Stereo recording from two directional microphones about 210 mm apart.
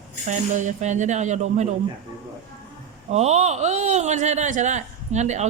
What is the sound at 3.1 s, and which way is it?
Speech, 30° right (ahead or behind).